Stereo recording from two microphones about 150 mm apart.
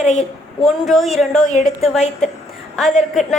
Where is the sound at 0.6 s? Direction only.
Centre (ahead or behind).